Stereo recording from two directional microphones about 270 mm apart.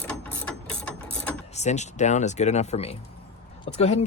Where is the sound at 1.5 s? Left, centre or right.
Left.